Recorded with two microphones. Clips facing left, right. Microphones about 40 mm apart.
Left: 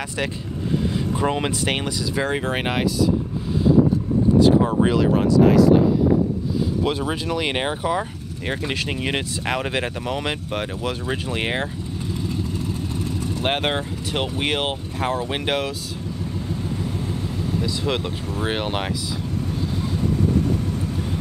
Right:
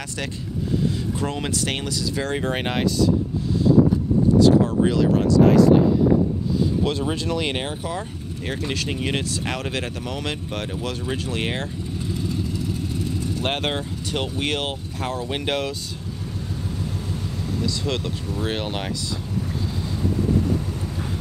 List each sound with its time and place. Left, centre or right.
0.9 s speech: left; by 2.8 s centre
4.4 s speech: centre
5.4 s speech: centre
6.8 s speech: centre
13.4 s speech: centre
17.8 s speech: centre